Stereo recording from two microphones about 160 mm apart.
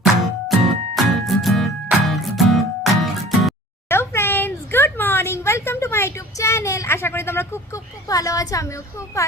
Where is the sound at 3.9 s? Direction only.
15° left (ahead or behind).